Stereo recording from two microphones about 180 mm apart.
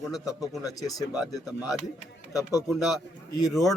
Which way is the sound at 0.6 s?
20° left (ahead or behind).